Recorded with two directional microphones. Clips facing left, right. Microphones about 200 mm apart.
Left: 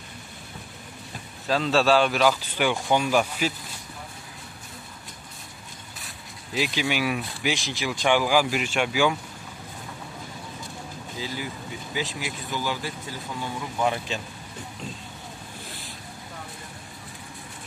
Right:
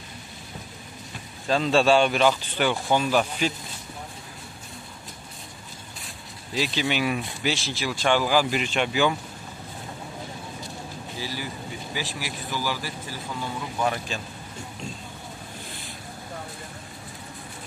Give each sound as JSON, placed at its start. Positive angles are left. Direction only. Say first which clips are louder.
{"t": 1.5, "sound": "speech", "louder": "right 1 dB", "side_deg": 0}
{"t": 6.5, "sound": "speech", "louder": "even", "side_deg": 15}
{"t": 11.1, "sound": "speech", "louder": "left 1 dB", "side_deg": 20}